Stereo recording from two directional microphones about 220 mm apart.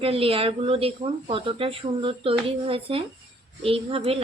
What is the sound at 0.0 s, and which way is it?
A woman's voice, 25° right (ahead or behind).